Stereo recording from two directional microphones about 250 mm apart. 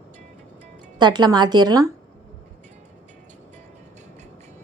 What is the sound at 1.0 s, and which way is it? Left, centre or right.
Speech, centre.